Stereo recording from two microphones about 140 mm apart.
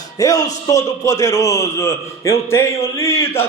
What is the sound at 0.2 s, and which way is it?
A man's voice, 25° left (ahead or behind).